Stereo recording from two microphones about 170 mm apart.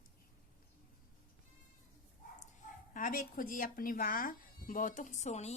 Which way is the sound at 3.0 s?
50° left (ahead or behind).